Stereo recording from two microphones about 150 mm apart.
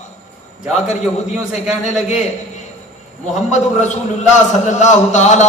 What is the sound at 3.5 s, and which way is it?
A man's voice, 55° left (ahead or behind).